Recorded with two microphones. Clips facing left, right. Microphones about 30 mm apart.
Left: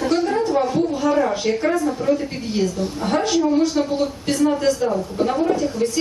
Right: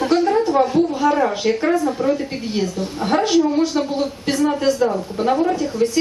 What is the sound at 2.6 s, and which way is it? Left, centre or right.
A woman's voice, centre.